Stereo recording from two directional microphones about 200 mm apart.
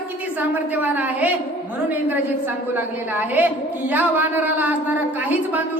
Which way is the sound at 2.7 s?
10° right (ahead or behind).